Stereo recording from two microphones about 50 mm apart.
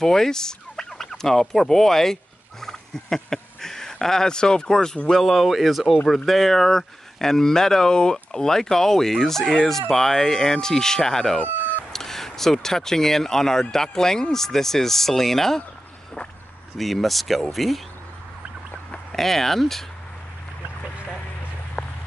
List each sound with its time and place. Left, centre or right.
0.0 s fowl: centre
2.6 s a sound: centre
5.1 s speech: centre
16.7 s speech: centre
19.1 s speech: centre